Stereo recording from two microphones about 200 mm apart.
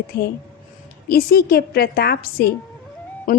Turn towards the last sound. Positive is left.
turn(degrees=45)  # may be behind; listen again after turning